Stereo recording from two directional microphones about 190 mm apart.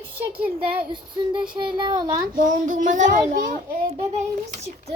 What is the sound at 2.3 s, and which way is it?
Child singing, 45° right (ahead or behind).